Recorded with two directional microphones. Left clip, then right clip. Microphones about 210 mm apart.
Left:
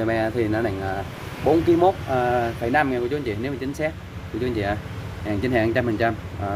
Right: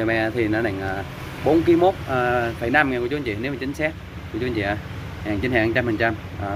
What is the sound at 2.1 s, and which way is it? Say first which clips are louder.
Speech: even; 5° left (ahead or behind).